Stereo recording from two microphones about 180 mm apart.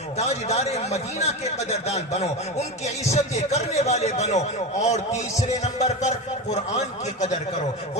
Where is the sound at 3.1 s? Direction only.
40° left (ahead or behind).